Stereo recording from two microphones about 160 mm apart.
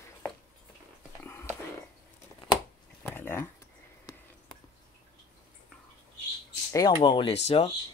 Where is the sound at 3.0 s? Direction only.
15° left (ahead or behind).